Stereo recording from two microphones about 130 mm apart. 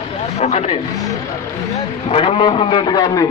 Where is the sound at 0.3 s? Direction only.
55° left (ahead or behind).